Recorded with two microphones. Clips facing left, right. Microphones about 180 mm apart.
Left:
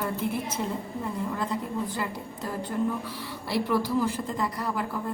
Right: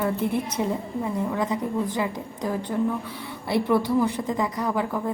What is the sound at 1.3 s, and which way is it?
Speech, 90° right.